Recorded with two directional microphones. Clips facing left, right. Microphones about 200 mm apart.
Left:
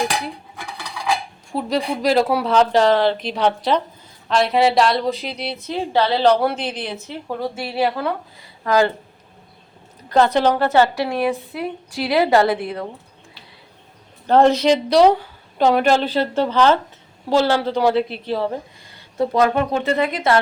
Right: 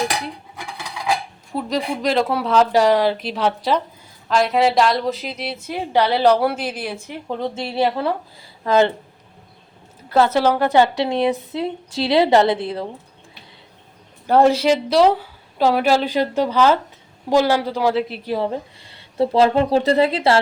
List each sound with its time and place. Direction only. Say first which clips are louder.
1.5 s a woman's voice: left 1 dB; centre (ahead or behind)
2.7 s a woman's voice: even; 10° right (ahead or behind)
5.6 s a woman's voice: even; 15° right (ahead or behind)
8.0 s a woman's voice: right 2 dB; 30° right (ahead or behind)
10.1 s a woman's voice: even; 5° right (ahead or behind); by 12.8 s 25° right (ahead or behind)
14.3 s a woman's voice: left 1 dB; 10° right (ahead or behind)
18.9 s speech: right 2 dB; 30° right (ahead or behind)